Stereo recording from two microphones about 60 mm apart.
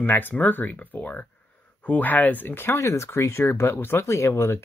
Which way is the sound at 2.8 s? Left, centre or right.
Left.